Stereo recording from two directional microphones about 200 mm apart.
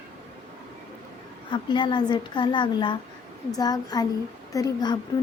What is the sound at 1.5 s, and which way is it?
Speech, 25° left (ahead or behind).